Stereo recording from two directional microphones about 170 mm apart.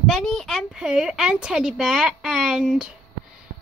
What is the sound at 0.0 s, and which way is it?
A woman's voice, 5° left (ahead or behind).